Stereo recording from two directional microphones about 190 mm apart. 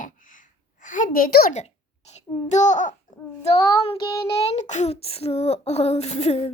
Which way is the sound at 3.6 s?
20° left (ahead or behind).